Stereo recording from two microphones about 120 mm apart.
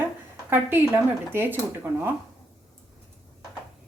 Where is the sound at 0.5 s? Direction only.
15° right (ahead or behind).